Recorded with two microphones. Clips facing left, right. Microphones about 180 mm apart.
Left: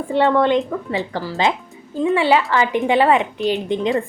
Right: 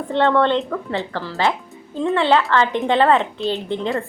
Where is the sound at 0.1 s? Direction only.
10° left (ahead or behind).